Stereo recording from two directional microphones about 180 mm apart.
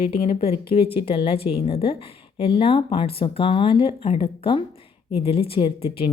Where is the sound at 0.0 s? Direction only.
35° left (ahead or behind).